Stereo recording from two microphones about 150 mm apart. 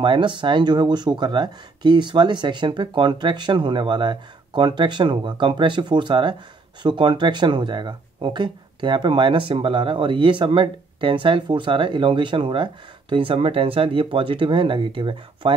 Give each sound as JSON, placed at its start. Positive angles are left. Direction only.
{"t": 0.0, "sound": "speech", "side_deg": -30}